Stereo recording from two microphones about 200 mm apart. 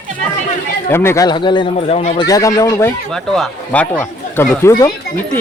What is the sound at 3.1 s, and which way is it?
Speech, centre (ahead or behind).